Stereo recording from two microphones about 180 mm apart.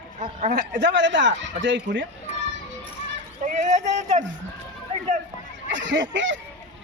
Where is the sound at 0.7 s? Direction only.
85° right.